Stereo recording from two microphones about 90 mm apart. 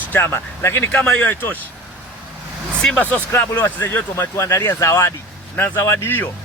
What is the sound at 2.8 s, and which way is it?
Speech, 15° left (ahead or behind).